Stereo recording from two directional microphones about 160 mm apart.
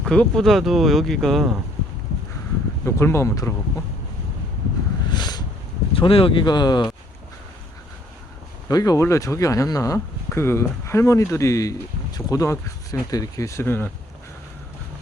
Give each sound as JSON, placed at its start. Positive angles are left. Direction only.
{"t": 0.0, "sound": "speech", "side_deg": 5}
{"t": 2.8, "sound": "speech", "side_deg": 15}
{"t": 5.0, "sound": "a sound", "side_deg": 25}
{"t": 5.9, "sound": "speech", "side_deg": 35}
{"t": 8.6, "sound": "speech", "side_deg": 25}